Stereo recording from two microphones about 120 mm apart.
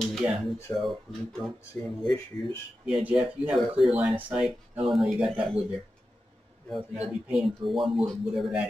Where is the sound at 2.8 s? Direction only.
10° right (ahead or behind).